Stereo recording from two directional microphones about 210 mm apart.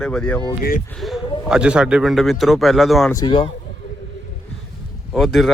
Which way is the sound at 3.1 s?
20° left (ahead or behind).